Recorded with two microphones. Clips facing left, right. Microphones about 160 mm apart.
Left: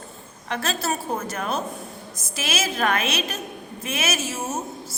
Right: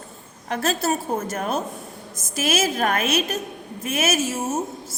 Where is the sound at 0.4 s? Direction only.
45° right (ahead or behind).